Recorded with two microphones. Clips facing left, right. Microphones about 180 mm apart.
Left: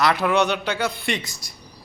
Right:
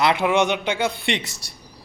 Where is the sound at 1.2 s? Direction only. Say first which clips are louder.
Right 1 dB; 70° right (ahead or behind).